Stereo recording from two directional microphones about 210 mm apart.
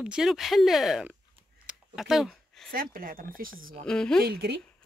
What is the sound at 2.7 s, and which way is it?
Speech, 45° right (ahead or behind).